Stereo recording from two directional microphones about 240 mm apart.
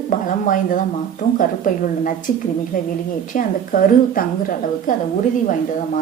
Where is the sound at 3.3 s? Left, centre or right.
Left.